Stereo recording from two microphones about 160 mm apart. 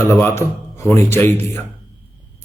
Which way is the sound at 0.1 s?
15° left (ahead or behind).